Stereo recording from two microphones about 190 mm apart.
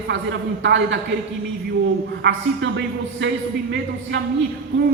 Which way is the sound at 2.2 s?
70° right (ahead or behind).